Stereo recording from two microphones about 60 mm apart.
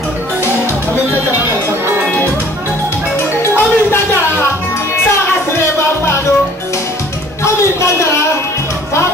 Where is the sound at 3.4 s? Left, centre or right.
Left.